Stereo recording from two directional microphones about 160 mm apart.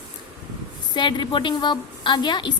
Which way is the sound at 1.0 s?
30° left (ahead or behind).